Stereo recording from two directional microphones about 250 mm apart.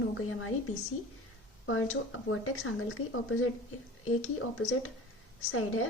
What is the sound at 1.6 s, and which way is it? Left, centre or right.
A woman's voice, left.